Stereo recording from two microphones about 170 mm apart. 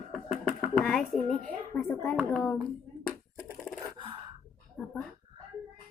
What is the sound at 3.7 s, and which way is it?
Gasp, 10° left (ahead or behind).